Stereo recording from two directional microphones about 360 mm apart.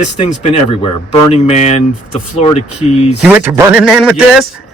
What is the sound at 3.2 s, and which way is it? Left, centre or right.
Speech, centre.